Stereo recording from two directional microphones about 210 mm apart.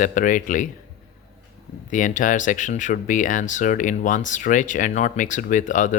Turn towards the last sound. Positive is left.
turn(degrees=35)  # may be behind; listen again after turning